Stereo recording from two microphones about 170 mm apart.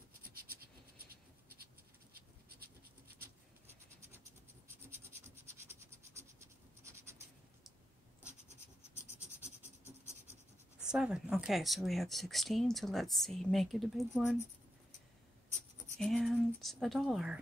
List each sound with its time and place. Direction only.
2.1 s a sound: 65° right (ahead or behind)
5.5 s scratch: 15° right (ahead or behind)
9.0 s scratch: 15° left (ahead or behind)
10.8 s speech: 5° right (ahead or behind)
16.0 s speech: centre (ahead or behind)